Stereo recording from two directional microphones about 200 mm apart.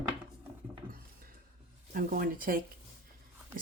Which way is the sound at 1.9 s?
45° right (ahead or behind).